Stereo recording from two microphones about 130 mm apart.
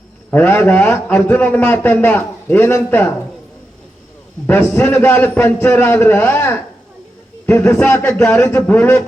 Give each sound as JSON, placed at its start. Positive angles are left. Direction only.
{"t": 0.3, "sound": "a man's voice", "side_deg": 15}
{"t": 4.4, "sound": "a man's voice", "side_deg": 15}